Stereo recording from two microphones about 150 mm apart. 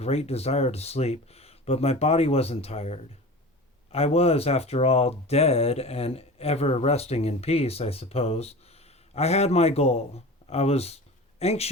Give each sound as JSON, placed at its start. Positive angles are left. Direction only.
{"t": 0.0, "sound": "speech", "side_deg": 45}